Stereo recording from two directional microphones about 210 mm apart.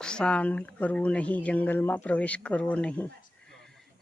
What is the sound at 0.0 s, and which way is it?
Speech, 5° left (ahead or behind).